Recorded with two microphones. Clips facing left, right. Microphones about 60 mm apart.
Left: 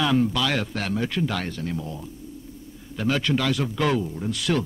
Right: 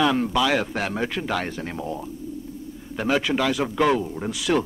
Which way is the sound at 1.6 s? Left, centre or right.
Right.